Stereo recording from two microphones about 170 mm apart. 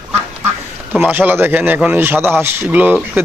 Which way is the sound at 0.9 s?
10° right (ahead or behind).